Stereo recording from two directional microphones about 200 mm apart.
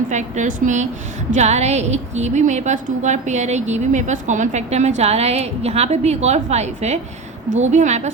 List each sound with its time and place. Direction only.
0.1 s a woman's voice: 35° right (ahead or behind)